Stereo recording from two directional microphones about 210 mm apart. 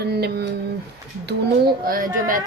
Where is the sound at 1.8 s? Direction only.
40° right (ahead or behind).